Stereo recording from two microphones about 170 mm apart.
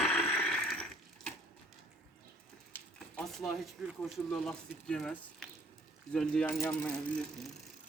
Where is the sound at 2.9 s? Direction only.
Centre (ahead or behind).